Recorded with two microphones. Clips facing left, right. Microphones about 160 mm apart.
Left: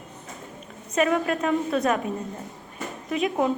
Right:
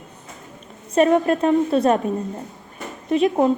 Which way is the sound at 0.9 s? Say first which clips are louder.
Right 6 dB; 35° right (ahead or behind).